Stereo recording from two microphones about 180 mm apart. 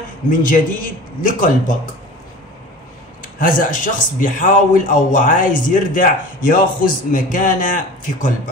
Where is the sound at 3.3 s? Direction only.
50° left (ahead or behind).